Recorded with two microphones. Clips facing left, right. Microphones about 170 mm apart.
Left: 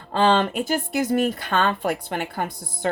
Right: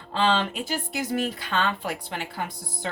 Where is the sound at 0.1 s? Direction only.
50° left (ahead or behind).